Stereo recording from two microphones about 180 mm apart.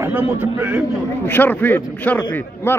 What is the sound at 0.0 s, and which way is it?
Speech, 10° right (ahead or behind).